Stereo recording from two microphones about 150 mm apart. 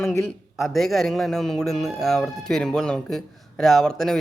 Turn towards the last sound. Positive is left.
turn(degrees=5)  # may be behind; listen again after turning